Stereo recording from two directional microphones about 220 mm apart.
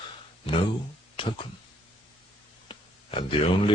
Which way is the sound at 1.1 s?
20° left (ahead or behind).